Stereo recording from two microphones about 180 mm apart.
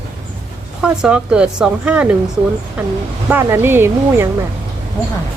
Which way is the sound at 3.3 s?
10° right (ahead or behind).